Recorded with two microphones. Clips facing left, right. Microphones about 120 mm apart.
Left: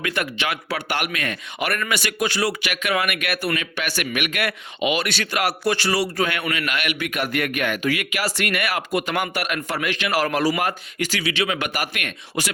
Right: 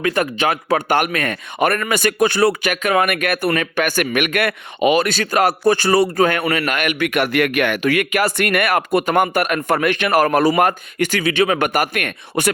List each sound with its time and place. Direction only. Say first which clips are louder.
0.0 s a man's voice: right 7 dB; 40° right (ahead or behind)
7.1 s a man's voice: right 7 dB; 80° right; by 12.5 s 50° right (ahead or behind)